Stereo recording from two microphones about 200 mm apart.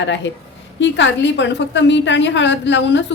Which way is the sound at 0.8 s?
60° left (ahead or behind).